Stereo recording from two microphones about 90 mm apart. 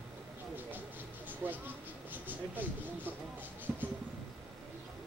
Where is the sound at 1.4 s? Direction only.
25° right (ahead or behind).